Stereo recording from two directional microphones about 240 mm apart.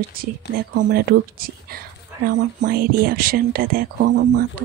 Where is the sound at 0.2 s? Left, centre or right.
Right.